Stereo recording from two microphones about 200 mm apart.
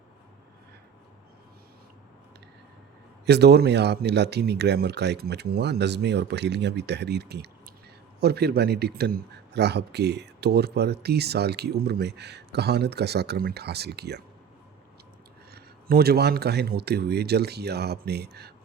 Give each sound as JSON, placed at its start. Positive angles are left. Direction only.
{"t": 3.2, "sound": "a man's voice", "side_deg": -55}
{"t": 15.5, "sound": "speech", "side_deg": -50}